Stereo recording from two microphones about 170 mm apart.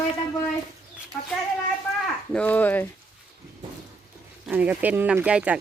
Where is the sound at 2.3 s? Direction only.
10° left (ahead or behind).